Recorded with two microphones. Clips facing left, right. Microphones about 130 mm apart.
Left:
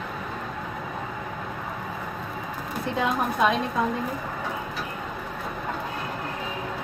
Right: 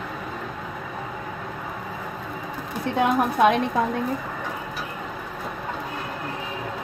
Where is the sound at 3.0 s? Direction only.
60° right (ahead or behind).